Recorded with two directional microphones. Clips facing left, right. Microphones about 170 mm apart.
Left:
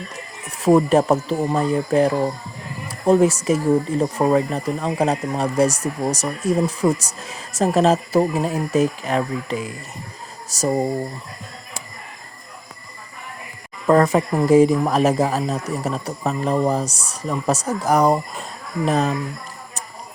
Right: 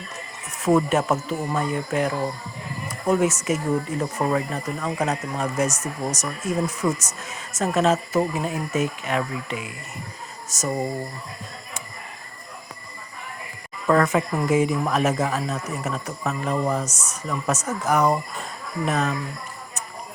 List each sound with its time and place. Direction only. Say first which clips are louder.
0.6 s speech: left 5 dB; 35° left (ahead or behind)
13.8 s speech: left 4 dB; 35° left (ahead or behind)